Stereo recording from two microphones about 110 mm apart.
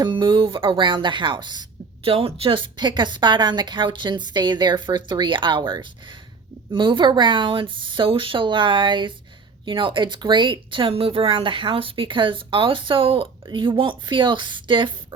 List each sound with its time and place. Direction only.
0.0 s speech: 45° right (ahead or behind)
2.0 s speech: 60° right (ahead or behind)